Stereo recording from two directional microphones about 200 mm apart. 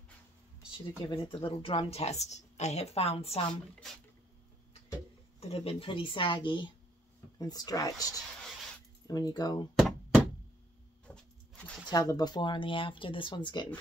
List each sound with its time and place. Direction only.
0.7 s speech: 25° left (ahead or behind)
5.4 s speech: 30° left (ahead or behind)
9.8 s knock: centre (ahead or behind)
11.1 s a sound: 5° left (ahead or behind)
11.9 s speech: 20° left (ahead or behind)